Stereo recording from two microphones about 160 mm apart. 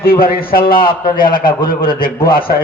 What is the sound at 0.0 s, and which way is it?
A man's voice, 65° left (ahead or behind).